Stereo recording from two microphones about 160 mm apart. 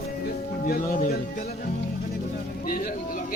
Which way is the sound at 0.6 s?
55° left (ahead or behind).